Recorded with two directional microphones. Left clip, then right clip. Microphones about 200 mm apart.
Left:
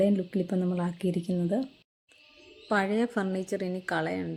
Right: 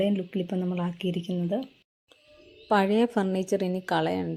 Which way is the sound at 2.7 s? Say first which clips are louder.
Right 4 dB; 15° right (ahead or behind).